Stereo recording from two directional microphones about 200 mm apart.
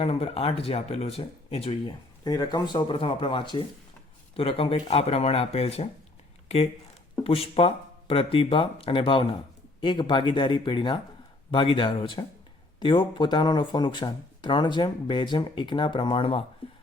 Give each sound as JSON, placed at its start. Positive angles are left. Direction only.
{"t": 0.0, "sound": "speech", "side_deg": 30}
{"t": 7.3, "sound": "speech", "side_deg": 30}